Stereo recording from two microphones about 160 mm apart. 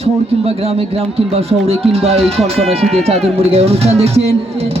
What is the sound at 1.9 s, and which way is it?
A man's voice, 40° right (ahead or behind).